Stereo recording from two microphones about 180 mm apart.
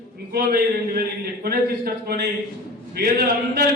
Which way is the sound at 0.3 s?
60° right (ahead or behind).